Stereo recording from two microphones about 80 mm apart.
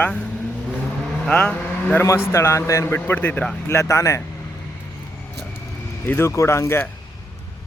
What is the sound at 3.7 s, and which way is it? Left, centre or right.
Speech, left.